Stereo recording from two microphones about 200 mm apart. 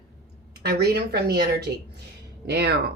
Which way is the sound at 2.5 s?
55° right (ahead or behind).